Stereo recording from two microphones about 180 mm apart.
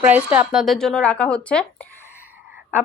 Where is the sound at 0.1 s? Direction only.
10° right (ahead or behind).